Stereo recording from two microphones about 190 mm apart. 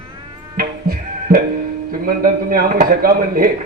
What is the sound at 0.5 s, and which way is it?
Music, 50° right (ahead or behind).